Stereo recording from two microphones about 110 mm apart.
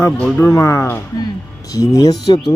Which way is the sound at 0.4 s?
30° left (ahead or behind).